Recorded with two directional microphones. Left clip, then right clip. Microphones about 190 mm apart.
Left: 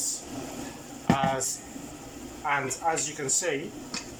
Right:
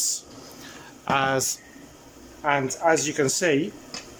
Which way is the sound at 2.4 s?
50° right (ahead or behind).